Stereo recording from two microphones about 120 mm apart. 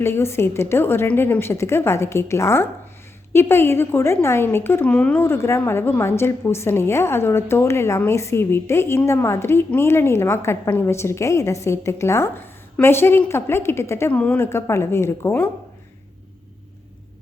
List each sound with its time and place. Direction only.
0.0 s a woman's voice: 20° left (ahead or behind)